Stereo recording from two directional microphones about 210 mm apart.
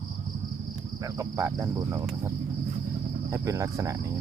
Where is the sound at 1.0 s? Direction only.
15° right (ahead or behind).